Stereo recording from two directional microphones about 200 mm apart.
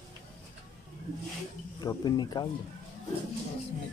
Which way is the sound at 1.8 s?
20° left (ahead or behind).